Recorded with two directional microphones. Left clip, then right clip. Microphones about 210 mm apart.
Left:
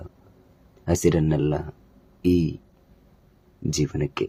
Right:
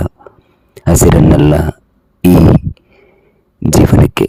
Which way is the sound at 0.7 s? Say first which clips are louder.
Right 12 dB; 50° right (ahead or behind).